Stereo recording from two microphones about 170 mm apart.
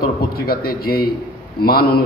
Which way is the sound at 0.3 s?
65° left (ahead or behind).